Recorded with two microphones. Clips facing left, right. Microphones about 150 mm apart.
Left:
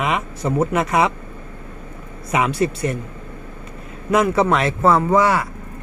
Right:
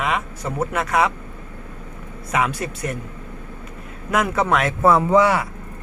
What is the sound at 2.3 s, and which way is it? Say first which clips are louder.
Speech: left 4 dB; 5° left (ahead or behind).